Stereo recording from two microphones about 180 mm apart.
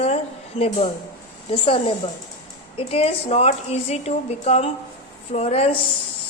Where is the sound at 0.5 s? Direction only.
30° left (ahead or behind).